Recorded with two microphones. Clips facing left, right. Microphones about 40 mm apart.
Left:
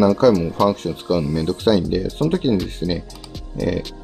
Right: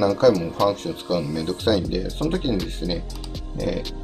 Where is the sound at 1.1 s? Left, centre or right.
Left.